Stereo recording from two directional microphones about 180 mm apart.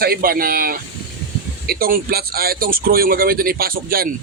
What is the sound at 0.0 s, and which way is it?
A man's voice, 55° right (ahead or behind).